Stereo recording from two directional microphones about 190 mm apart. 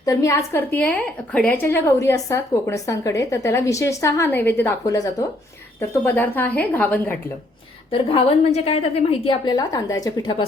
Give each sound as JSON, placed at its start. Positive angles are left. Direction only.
{"t": 0.0, "sound": "a woman's voice", "side_deg": 15}
{"t": 7.9, "sound": "a woman's voice", "side_deg": 30}